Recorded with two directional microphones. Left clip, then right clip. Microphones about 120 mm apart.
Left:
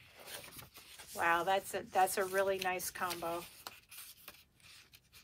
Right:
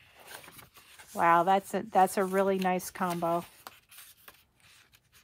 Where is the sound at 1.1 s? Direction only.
50° right (ahead or behind).